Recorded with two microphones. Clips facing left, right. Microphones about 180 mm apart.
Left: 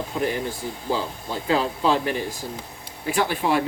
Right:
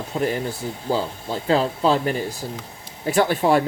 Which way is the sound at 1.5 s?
35° right (ahead or behind).